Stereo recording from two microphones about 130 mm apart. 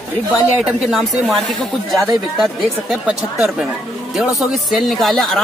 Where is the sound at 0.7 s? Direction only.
Centre (ahead or behind).